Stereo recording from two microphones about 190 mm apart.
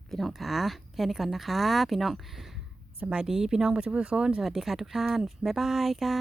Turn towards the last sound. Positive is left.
turn(degrees=0)  # may be behind; listen again after turning